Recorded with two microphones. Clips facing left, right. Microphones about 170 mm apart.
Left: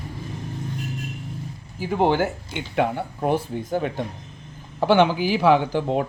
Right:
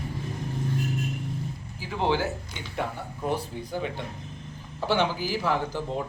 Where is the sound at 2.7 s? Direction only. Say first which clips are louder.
Left 9 dB; 70° left (ahead or behind).